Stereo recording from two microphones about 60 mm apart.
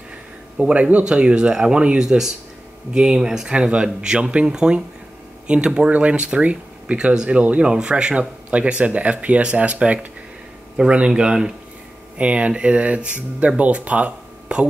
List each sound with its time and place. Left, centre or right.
0.6 s speech: centre